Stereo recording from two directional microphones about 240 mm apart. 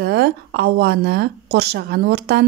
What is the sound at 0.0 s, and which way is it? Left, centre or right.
A woman's voice, right.